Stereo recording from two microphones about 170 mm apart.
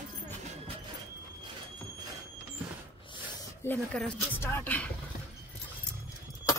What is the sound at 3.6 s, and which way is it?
Speech, 10° left (ahead or behind).